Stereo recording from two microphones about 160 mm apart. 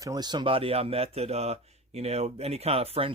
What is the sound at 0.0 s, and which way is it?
Speech, 25° right (ahead or behind).